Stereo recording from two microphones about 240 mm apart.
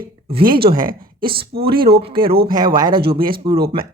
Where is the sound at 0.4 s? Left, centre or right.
Right.